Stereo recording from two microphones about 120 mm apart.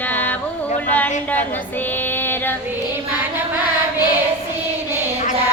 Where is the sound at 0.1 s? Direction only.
15° left (ahead or behind).